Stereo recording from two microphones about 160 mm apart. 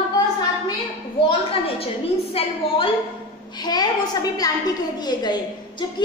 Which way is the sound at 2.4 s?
35° left (ahead or behind).